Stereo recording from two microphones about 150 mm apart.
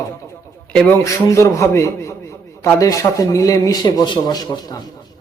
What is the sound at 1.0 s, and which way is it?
Speech, 20° left (ahead or behind).